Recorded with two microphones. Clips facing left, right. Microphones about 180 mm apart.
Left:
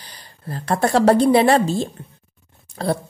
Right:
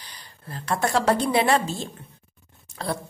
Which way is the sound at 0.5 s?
35° left (ahead or behind).